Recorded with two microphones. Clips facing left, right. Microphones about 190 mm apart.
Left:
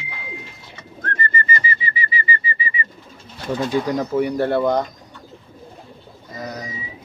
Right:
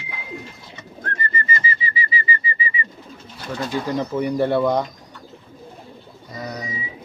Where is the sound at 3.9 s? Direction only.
5° left (ahead or behind).